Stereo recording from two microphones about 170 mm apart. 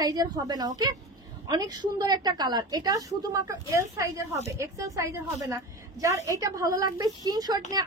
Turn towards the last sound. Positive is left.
turn(degrees=-20)  # may be behind; listen again after turning